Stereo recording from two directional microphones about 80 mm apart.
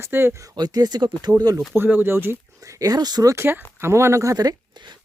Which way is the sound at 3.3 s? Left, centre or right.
Right.